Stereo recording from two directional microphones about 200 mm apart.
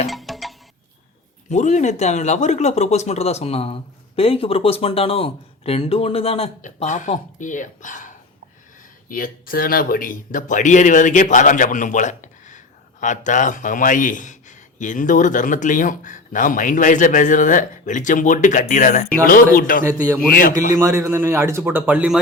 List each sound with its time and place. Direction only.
0.1 s music: centre (ahead or behind)
1.5 s speech: 35° left (ahead or behind)
19.8 s speech: 15° right (ahead or behind)
20.3 s speech: 40° left (ahead or behind)
20.7 s speech: 15° right (ahead or behind)